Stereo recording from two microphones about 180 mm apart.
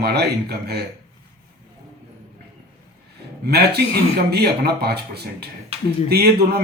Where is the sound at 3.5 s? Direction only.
65° right (ahead or behind).